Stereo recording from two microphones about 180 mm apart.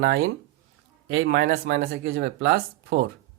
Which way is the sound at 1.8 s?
60° right (ahead or behind).